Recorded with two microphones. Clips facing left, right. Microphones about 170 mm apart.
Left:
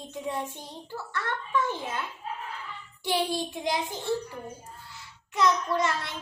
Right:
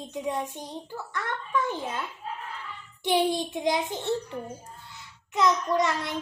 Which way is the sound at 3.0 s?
20° right (ahead or behind).